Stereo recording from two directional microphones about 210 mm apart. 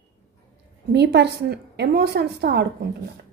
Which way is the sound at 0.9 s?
55° right (ahead or behind).